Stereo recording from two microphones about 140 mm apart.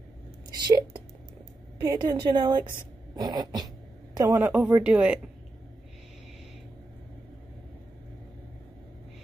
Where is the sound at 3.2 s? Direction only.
30° right (ahead or behind).